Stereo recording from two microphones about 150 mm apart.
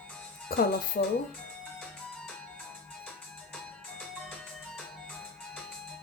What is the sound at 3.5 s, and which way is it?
Music, 5° left (ahead or behind).